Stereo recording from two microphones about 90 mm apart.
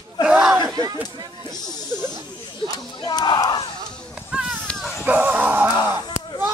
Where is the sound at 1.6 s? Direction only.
50° left (ahead or behind).